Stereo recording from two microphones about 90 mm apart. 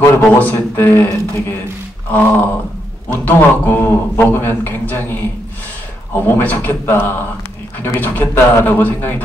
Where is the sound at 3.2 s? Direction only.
20° left (ahead or behind).